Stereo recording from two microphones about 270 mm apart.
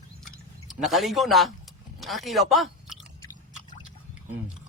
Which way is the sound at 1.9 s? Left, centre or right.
Centre.